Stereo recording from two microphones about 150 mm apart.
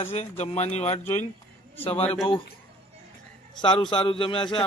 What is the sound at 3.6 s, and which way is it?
Speech, 35° left (ahead or behind).